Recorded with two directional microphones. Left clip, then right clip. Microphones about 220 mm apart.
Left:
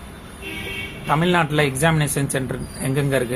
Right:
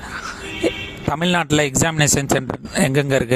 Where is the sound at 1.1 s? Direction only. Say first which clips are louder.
Even; 50° right (ahead or behind).